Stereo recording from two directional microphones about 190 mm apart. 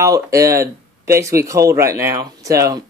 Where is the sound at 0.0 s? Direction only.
15° right (ahead or behind).